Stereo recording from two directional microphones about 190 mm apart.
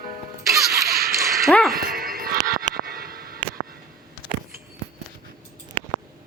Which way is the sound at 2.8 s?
50° right (ahead or behind).